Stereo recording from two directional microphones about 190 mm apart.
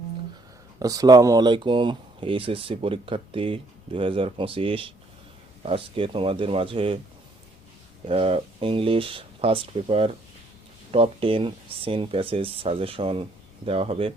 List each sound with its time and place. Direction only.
0.8 s speech: 20° right (ahead or behind)
8.0 s speech: 30° right (ahead or behind)